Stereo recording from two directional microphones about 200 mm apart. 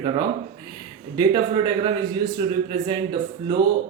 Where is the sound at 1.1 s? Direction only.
20° right (ahead or behind).